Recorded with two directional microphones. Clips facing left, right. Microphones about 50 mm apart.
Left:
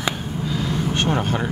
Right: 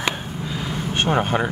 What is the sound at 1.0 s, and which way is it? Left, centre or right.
Speech, right.